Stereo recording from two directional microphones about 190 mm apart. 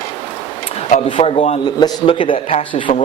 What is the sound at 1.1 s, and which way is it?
Speech, 30° left (ahead or behind).